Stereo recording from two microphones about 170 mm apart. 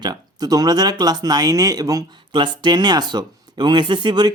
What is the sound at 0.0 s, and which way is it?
Speech, 25° right (ahead or behind).